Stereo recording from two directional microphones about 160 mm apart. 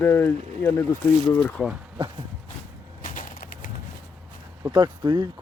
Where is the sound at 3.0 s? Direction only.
60° left (ahead or behind).